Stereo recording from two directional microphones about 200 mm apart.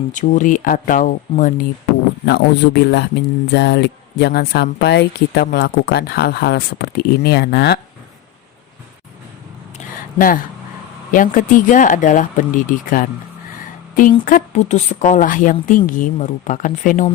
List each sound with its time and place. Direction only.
0.1 s speech: 40° left (ahead or behind)
2.2 s speech: 55° left (ahead or behind)
9.7 s a sound: 45° left (ahead or behind)
11.1 s speech: 40° left (ahead or behind)